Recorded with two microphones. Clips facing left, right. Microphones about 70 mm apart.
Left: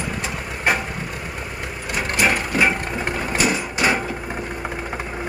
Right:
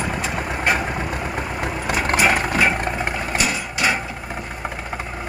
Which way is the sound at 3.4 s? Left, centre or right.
Left.